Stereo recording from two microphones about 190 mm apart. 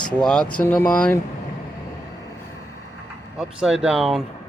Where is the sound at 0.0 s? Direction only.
5° left (ahead or behind).